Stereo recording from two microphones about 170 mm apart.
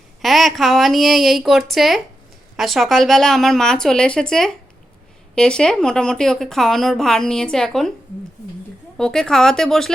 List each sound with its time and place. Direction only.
0.2 s a woman's voice: centre (ahead or behind)
9.0 s a woman's voice: 5° left (ahead or behind)